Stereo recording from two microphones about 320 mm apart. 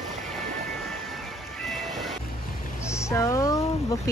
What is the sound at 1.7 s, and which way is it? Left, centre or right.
Music, centre.